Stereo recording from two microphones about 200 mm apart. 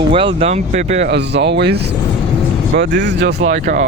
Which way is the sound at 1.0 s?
60° right (ahead or behind).